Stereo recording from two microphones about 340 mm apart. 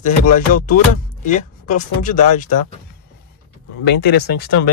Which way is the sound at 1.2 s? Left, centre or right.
Left.